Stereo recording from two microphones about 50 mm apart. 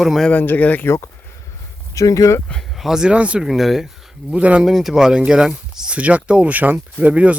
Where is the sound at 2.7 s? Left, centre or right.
Centre.